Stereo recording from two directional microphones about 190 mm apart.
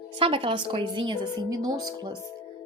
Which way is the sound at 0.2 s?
25° right (ahead or behind).